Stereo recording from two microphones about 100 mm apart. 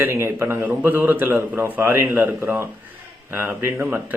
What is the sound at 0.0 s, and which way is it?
Speech, 25° right (ahead or behind).